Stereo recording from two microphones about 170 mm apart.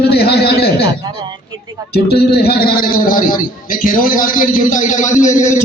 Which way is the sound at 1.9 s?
70° left (ahead or behind).